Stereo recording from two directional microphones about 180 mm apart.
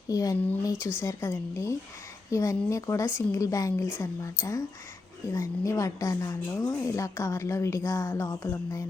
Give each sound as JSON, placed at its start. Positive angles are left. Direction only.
{"t": 0.1, "sound": "a woman's voice", "side_deg": 20}